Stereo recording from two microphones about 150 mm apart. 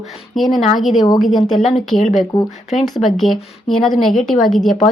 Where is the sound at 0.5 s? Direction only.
Centre (ahead or behind).